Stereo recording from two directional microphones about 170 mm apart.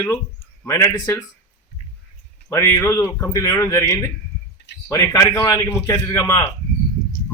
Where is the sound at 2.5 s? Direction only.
15° left (ahead or behind).